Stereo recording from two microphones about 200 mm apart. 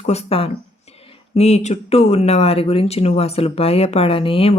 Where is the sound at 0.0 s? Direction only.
30° left (ahead or behind).